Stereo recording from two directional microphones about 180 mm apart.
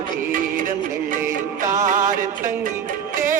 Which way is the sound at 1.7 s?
45° right (ahead or behind).